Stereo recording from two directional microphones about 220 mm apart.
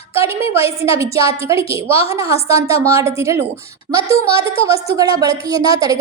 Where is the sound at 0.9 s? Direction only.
15° right (ahead or behind).